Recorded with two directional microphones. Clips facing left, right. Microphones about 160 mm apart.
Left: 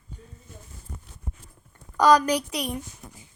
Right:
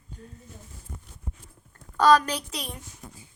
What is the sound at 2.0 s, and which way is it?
Speech, 15° left (ahead or behind).